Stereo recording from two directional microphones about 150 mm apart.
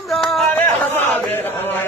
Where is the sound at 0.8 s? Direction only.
15° left (ahead or behind).